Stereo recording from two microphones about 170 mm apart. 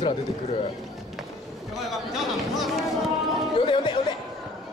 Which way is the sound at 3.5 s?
30° left (ahead or behind).